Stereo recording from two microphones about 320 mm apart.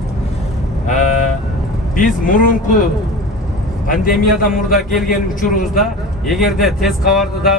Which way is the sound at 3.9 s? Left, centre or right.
Left.